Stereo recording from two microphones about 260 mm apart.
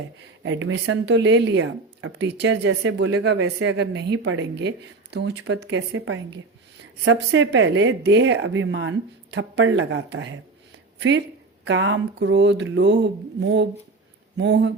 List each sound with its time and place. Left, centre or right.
0.6 s speech: right
11.6 s speech: right